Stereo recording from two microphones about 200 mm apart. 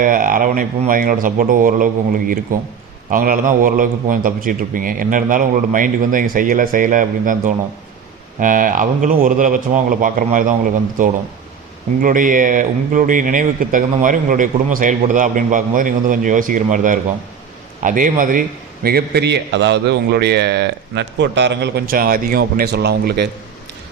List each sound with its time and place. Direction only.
0.0 s a man's voice: 40° right (ahead or behind)
12.0 s a man's voice: 40° right (ahead or behind)